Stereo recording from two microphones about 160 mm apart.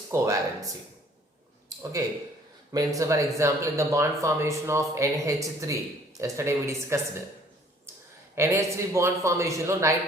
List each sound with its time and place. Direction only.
0.1 s speech: 20° right (ahead or behind)
1.7 s a sound: 20° right (ahead or behind)
2.7 s speech: 20° right (ahead or behind)
8.4 s speech: 20° right (ahead or behind)